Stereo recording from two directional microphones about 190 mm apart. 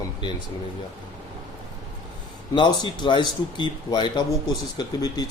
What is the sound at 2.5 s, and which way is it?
A man's voice, 25° left (ahead or behind).